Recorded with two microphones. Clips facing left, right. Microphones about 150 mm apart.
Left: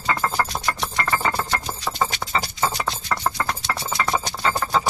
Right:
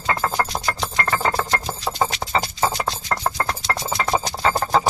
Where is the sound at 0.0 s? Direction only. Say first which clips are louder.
Right 1 dB; 25° right (ahead or behind).